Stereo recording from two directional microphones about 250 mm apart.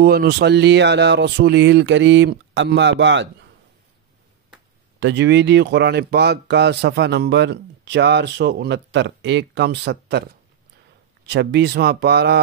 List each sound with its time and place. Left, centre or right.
0.0 s speech: right
5.0 s speech: right